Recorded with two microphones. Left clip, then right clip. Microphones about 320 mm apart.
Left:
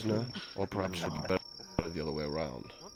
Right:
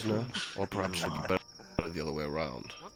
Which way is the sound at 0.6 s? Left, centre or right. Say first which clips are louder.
Even; centre.